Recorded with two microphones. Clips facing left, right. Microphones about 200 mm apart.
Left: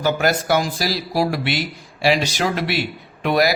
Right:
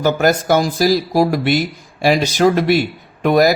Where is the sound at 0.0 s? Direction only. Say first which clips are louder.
Right 4 dB; 45° right (ahead or behind).